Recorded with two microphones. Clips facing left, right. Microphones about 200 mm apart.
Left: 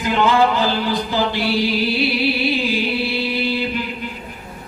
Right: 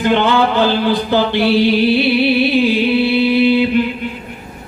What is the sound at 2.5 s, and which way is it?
Music, 60° right (ahead or behind).